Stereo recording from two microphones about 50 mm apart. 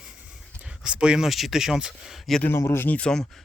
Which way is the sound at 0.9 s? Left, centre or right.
Centre.